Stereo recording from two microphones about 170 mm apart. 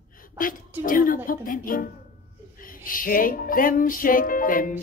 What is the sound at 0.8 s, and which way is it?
Music, 55° left (ahead or behind).